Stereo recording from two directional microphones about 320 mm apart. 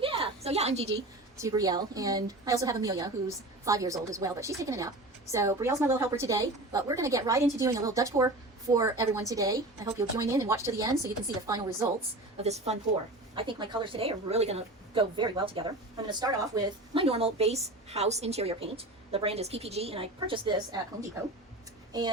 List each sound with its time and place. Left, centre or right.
0.0 s a sound: centre
1.4 s a woman's voice: centre
12.4 s a woman's voice: centre
21.9 s a woman's voice: centre